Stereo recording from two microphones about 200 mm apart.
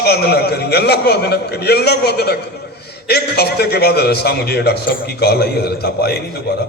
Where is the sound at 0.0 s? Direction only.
55° left (ahead or behind).